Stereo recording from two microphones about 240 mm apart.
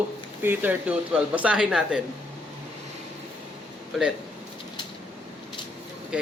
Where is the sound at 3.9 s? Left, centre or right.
Centre.